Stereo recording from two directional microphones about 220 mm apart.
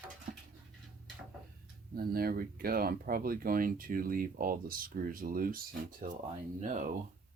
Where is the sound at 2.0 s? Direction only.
40° right (ahead or behind).